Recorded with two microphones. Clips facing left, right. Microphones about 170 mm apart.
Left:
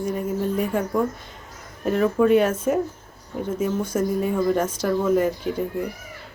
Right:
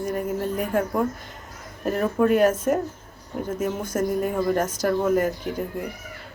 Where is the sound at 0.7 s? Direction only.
5° right (ahead or behind).